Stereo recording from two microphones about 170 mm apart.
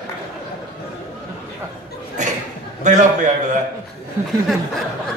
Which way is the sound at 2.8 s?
45° right (ahead or behind).